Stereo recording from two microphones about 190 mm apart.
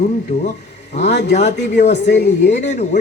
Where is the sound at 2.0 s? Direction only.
65° left (ahead or behind).